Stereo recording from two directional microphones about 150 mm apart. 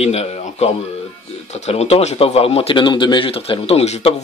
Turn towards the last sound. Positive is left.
turn(degrees=45)  # may be behind; listen again after turning